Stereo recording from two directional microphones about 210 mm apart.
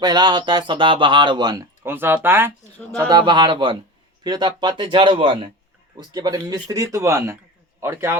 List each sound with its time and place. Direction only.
0.0 s speech: 20° right (ahead or behind)
3.1 s speech: 20° right (ahead or behind)